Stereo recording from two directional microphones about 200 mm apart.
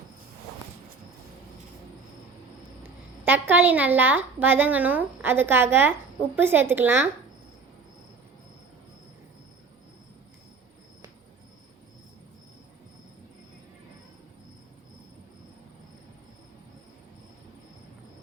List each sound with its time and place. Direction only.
2.8 s a woman's voice: 10° right (ahead or behind)